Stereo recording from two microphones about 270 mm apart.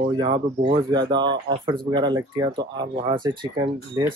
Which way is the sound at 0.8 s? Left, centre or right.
Centre.